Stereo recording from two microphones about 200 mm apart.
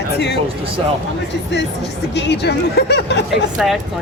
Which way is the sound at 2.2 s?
55° left (ahead or behind).